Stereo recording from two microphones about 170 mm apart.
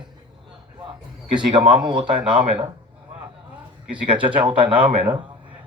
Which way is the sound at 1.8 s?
25° right (ahead or behind).